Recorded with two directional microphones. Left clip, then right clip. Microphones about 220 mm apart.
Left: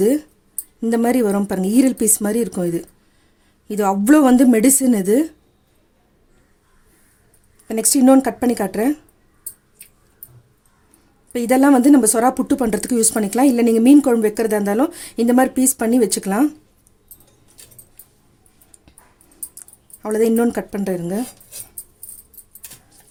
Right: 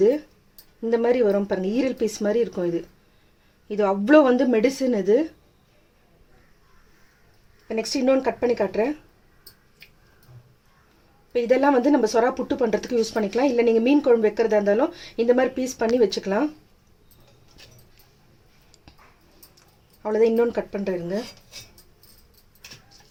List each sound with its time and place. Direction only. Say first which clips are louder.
0.9 s speech: left 2 dB; 60° left (ahead or behind)
3.8 s speech: left 2 dB; 60° left (ahead or behind)
7.7 s speech: left 7 dB; 60° left (ahead or behind)
11.3 s speech: left 4 dB; 60° left (ahead or behind)
20.0 s speech: left 2 dB; 60° left (ahead or behind)